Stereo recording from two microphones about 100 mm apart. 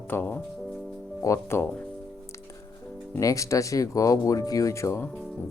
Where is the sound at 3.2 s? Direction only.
35° left (ahead or behind).